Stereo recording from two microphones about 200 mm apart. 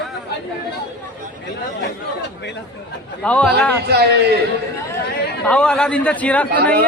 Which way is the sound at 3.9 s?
55° right (ahead or behind).